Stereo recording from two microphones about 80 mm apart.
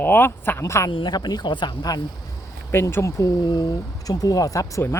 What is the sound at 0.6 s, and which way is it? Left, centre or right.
Speech, left.